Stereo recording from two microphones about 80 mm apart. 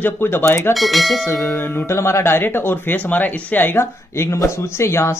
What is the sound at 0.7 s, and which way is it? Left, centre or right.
Speech, centre.